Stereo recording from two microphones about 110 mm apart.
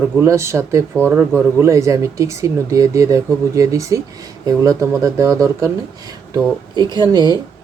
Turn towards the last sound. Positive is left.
turn(degrees=-40)  # may be behind; listen again after turning